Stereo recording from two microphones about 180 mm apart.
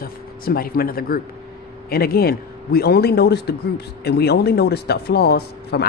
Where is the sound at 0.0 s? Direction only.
55° left (ahead or behind).